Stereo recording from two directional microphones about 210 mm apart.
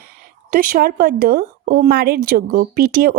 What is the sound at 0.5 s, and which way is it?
Speech, 40° right (ahead or behind).